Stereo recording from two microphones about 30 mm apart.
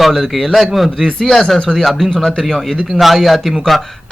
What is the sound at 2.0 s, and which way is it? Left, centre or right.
Speech, centre.